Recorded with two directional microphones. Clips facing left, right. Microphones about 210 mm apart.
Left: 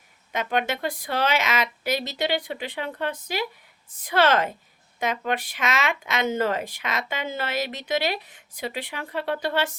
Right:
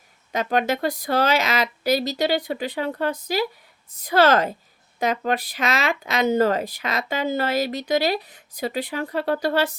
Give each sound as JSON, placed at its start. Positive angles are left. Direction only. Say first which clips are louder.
{"t": 0.3, "sound": "speech", "louder": "right 4 dB", "side_deg": -35}